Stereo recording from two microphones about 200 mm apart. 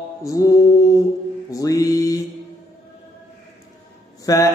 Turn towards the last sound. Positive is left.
turn(degrees=15)  # may be behind; listen again after turning